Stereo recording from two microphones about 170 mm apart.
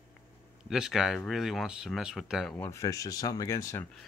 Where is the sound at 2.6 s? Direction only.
15° left (ahead or behind).